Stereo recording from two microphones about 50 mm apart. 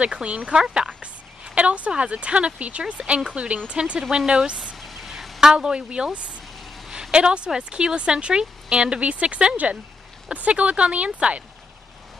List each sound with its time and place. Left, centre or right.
0.0 s a woman's voice: right
4.7 s a sound: centre
5.4 s speech: centre